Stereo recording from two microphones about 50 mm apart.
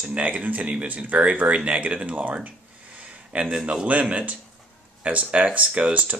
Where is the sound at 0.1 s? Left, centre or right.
Right.